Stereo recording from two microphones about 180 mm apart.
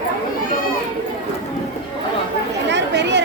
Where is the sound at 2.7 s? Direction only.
75° right (ahead or behind).